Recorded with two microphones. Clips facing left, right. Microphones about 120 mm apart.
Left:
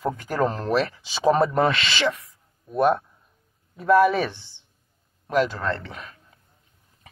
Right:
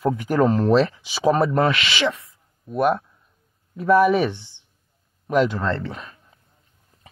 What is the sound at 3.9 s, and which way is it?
Speech, 15° right (ahead or behind).